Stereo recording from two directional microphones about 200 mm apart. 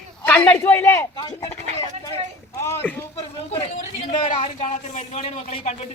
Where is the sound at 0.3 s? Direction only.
10° left (ahead or behind).